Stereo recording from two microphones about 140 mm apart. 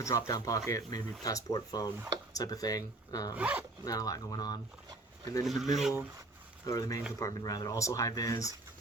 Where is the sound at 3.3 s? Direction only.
10° right (ahead or behind).